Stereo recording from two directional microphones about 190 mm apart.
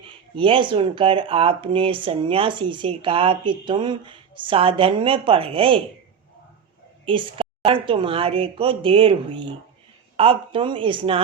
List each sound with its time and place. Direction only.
0.0 s speech: 25° right (ahead or behind)
7.0 s speech: 30° right (ahead or behind)